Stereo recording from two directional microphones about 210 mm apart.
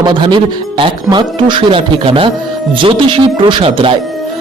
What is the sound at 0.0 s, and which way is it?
A man's voice, 20° right (ahead or behind).